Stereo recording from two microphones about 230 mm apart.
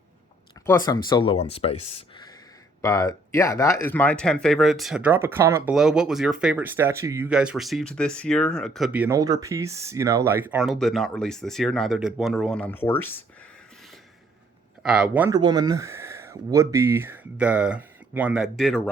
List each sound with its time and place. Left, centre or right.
0.6 s speech: centre
14.8 s speech: centre
15.4 s speech: centre